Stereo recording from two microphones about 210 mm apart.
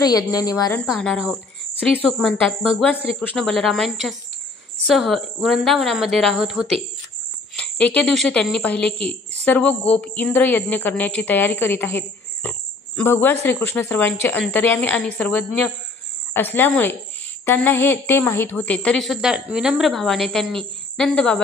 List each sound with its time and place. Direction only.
0.0 s speech: 15° left (ahead or behind)
0.7 s a woman's voice: centre (ahead or behind)